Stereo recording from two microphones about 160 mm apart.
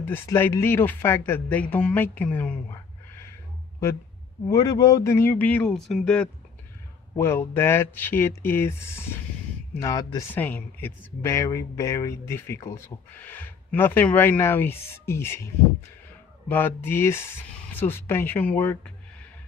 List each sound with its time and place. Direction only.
0.0 s speech: 15° left (ahead or behind)
4.5 s speech: 20° left (ahead or behind); by 6.3 s 5° left (ahead or behind)
7.2 s speech: 15° left (ahead or behind)
10.3 s speech: 10° left (ahead or behind)